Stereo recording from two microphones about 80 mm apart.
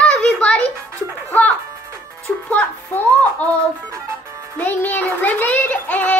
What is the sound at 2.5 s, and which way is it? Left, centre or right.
Speech, centre.